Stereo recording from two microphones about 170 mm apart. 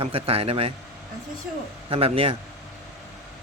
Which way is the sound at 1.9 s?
35° right (ahead or behind).